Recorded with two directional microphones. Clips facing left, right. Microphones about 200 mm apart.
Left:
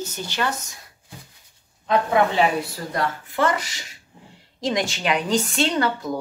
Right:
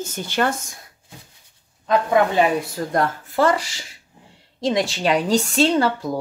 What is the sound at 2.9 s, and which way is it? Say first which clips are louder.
A woman's voice: right 4 dB; 45° right (ahead or behind).